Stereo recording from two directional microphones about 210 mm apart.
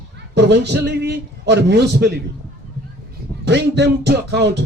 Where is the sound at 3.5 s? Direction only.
55° right (ahead or behind).